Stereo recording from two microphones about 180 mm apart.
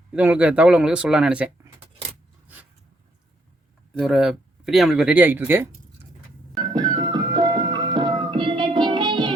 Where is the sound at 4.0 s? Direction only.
Centre (ahead or behind).